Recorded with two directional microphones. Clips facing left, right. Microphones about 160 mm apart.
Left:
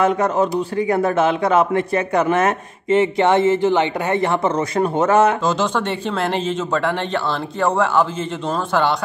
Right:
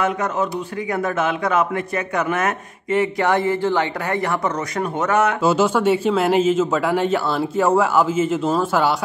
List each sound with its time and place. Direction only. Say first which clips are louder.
0.0 s speech: left 4 dB; 35° left (ahead or behind)
5.4 s speech: right 3 dB; 10° right (ahead or behind)